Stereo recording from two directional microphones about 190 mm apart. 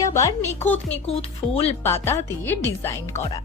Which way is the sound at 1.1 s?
30° left (ahead or behind).